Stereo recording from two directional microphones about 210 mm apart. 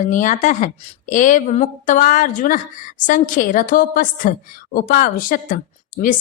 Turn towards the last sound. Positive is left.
turn(degrees=40)  # may be behind; listen again after turning